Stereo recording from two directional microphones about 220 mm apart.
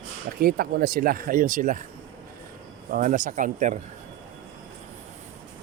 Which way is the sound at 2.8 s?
35° right (ahead or behind).